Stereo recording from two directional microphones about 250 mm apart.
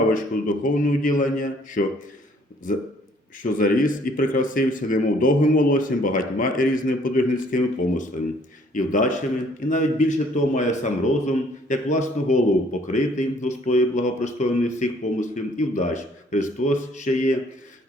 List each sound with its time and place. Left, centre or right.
0.1 s speech: left